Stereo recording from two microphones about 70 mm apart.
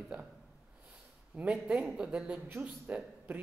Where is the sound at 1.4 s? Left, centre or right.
Centre.